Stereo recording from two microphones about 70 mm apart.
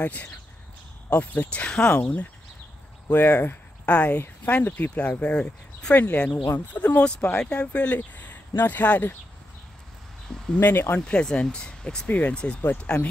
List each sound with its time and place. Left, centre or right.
0.0 s speech: left
1.9 s speech: left
3.9 s speech: centre
5.9 s speech: left
10.6 s speech: left
11.1 s speech: centre